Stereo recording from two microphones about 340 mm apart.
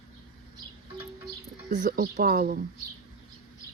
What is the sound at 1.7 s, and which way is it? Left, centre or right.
Speech, right.